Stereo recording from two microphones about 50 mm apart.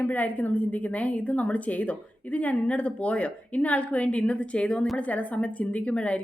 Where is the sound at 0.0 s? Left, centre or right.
Left.